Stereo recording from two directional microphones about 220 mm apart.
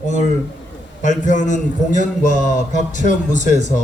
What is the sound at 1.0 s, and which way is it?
A man's voice, 35° left (ahead or behind).